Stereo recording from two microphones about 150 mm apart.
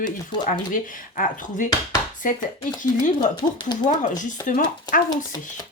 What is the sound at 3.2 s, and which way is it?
Speech, 30° left (ahead or behind).